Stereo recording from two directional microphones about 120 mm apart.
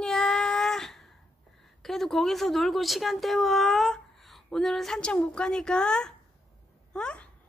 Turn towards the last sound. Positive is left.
turn(degrees=10)  # may be behind; listen again after turning